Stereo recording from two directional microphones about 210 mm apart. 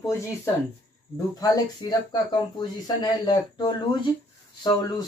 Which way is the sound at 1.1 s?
15° left (ahead or behind).